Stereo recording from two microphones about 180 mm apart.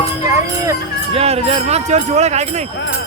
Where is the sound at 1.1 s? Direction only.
35° right (ahead or behind).